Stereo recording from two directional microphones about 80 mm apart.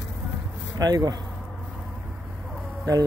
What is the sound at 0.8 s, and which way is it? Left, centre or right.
Speech, right.